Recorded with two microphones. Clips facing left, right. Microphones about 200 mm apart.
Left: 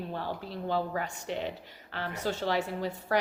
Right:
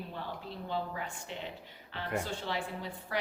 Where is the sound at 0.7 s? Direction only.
75° left (ahead or behind).